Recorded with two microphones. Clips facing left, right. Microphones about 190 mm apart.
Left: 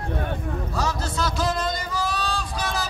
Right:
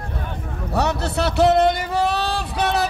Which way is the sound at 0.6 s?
65° right (ahead or behind).